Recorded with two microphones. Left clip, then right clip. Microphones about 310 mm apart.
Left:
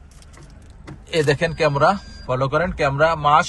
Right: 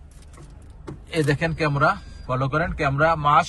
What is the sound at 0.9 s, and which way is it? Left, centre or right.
Speech, centre.